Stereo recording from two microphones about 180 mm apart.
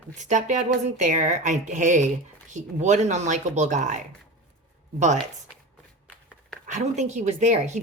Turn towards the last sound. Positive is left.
turn(degrees=-40)  # may be behind; listen again after turning